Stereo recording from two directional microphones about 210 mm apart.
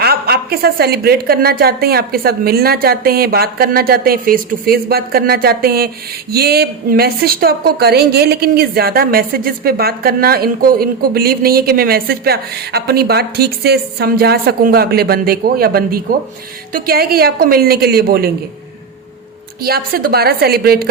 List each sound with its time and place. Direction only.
0.0 s a woman's voice: 50° right (ahead or behind)
19.6 s a woman's voice: 45° right (ahead or behind)